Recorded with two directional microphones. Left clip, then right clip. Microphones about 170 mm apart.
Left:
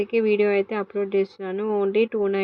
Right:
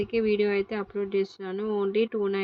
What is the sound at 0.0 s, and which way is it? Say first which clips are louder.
A woman's voice: left 5 dB; centre (ahead or behind).